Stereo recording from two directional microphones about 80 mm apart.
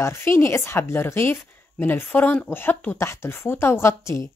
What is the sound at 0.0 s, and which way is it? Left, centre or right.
A woman's voice, left.